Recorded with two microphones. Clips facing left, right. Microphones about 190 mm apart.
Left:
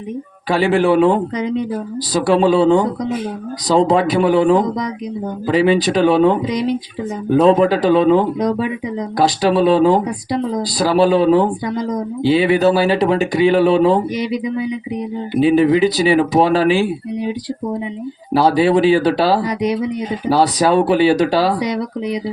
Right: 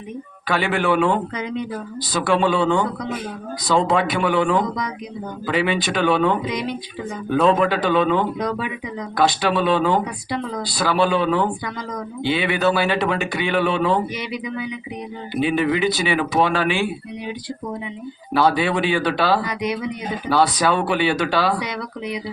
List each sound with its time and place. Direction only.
0.5 s speech: 35° left (ahead or behind)
18.3 s speech: 35° left (ahead or behind)